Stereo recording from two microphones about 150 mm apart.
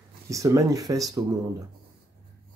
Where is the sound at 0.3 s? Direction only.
20° right (ahead or behind).